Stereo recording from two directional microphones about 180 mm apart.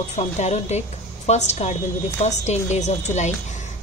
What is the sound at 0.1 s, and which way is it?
Speech, 40° left (ahead or behind).